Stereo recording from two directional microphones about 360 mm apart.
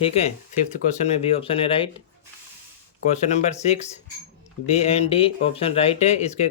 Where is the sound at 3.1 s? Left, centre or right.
Centre.